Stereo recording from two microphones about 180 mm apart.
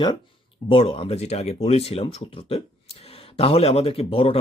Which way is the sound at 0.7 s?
30° left (ahead or behind).